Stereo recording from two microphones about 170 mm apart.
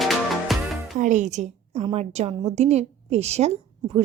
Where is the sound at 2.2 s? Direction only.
40° right (ahead or behind).